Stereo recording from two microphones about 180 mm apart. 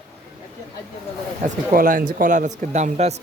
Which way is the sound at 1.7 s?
50° right (ahead or behind).